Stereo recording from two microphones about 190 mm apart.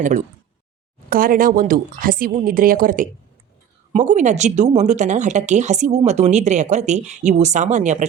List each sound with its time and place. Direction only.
0.0 s a woman's voice: 40° right (ahead or behind)